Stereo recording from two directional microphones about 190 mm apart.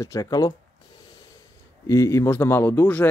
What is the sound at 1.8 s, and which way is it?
Speech, 15° left (ahead or behind).